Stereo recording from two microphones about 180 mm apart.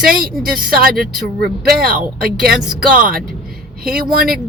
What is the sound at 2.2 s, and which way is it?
Speech, 55° right (ahead or behind).